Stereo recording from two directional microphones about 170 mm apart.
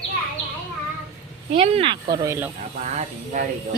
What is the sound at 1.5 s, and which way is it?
Speech, 35° right (ahead or behind).